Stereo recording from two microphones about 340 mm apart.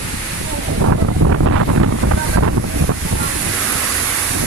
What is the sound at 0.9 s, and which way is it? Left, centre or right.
Wind noise, right.